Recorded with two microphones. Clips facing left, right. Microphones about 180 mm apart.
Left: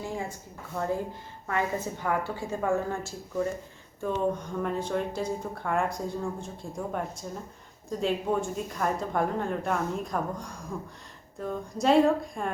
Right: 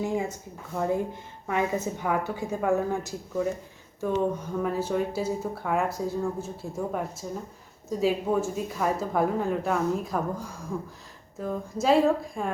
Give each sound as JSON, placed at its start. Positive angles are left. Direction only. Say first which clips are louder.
{"t": 0.0, "sound": "a woman's voice", "louder": "right 6 dB", "side_deg": -20}
{"t": 1.5, "sound": "a woman's voice", "louder": "right 3 dB", "side_deg": -15}